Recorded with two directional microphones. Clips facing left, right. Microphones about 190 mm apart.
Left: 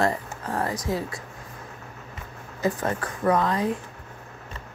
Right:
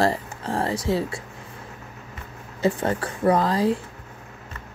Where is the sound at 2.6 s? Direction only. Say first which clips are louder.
Right 3 dB; 30° right (ahead or behind).